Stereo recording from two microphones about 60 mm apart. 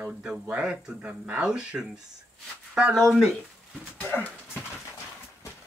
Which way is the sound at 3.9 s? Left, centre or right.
Left.